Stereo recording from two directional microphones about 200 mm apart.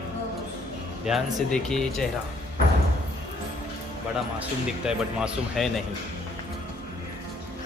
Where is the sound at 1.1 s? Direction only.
Centre (ahead or behind).